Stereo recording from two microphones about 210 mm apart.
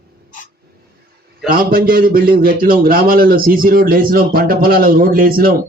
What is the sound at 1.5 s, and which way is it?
Speech, 45° right (ahead or behind).